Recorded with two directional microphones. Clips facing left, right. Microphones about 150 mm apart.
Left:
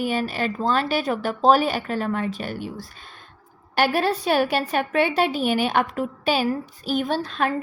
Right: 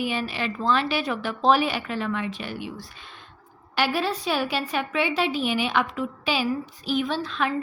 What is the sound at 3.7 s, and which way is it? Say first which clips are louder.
Speech: left 4 dB; 50° left (ahead or behind).